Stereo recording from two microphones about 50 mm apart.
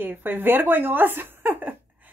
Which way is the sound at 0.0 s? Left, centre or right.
Right.